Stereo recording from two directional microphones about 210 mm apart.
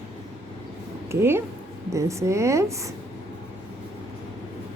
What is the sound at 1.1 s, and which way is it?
A woman's voice, 10° right (ahead or behind).